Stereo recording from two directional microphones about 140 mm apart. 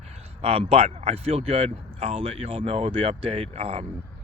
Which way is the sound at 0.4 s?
45° right (ahead or behind).